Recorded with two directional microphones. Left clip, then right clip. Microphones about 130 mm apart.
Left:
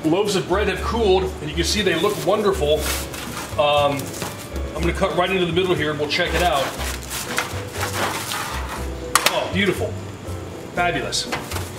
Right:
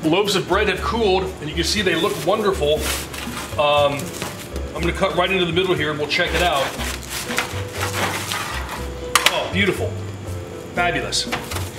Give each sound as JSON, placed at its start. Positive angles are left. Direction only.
{"t": 0.5, "sound": "speech", "side_deg": -20}
{"t": 0.9, "sound": "speech", "side_deg": -10}
{"t": 4.7, "sound": "a sound", "side_deg": 0}
{"t": 9.1, "sound": "computer keyboard", "side_deg": 0}
{"t": 10.8, "sound": "speech", "side_deg": -5}